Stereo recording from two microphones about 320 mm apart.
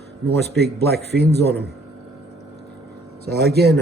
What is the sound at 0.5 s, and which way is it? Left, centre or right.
Speech, right.